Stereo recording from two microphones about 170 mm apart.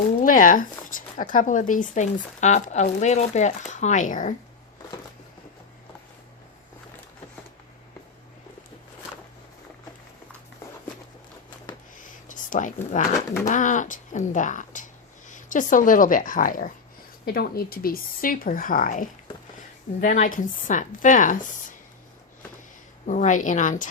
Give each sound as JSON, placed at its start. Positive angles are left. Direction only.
{"t": 0.2, "sound": "speech", "side_deg": 50}
{"t": 12.3, "sound": "speech", "side_deg": 50}
{"t": 23.0, "sound": "speech", "side_deg": 50}